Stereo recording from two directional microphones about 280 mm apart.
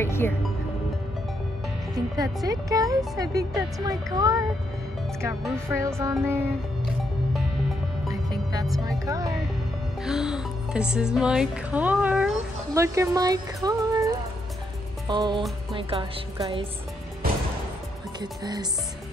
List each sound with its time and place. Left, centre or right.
0.0 s speech: centre
2.1 s speech: centre
8.1 s music: centre
8.7 s speech: centre
13.7 s music: centre
15.0 s a woman's voice: centre
18.2 s speech: centre